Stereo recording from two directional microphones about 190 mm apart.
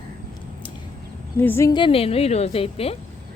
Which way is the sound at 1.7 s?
30° left (ahead or behind).